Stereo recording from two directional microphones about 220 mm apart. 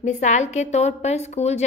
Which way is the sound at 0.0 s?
30° left (ahead or behind).